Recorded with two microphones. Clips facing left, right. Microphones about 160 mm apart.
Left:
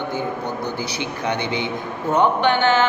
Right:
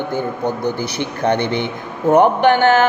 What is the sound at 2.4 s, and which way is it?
Speech, 50° right (ahead or behind).